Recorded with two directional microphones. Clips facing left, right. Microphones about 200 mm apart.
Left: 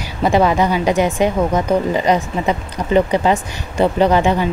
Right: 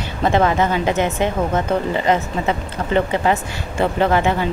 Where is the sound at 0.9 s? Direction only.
20° right (ahead or behind).